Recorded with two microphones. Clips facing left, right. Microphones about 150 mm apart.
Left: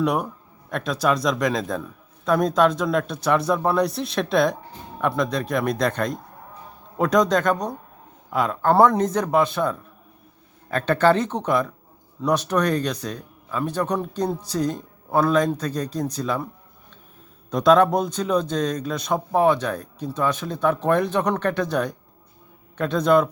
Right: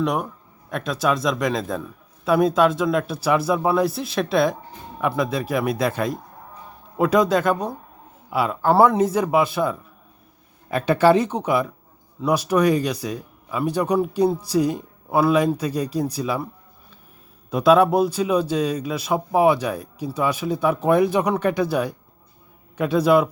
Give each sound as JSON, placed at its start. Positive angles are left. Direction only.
{"t": 0.0, "sound": "a man's voice", "side_deg": 0}
{"t": 17.5, "sound": "speech", "side_deg": -5}